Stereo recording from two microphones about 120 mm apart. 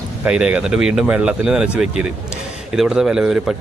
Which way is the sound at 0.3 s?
10° right (ahead or behind).